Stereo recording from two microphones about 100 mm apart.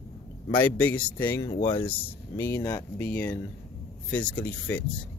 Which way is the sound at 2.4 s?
35° left (ahead or behind).